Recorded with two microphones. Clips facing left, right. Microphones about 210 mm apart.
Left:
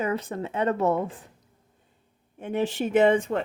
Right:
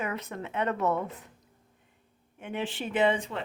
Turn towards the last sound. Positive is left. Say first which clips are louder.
# left 6 dB
turn(degrees=45)  # may be behind; listen again after turning